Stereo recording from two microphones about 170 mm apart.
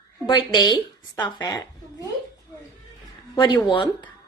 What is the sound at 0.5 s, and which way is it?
A woman's voice, 30° left (ahead or behind).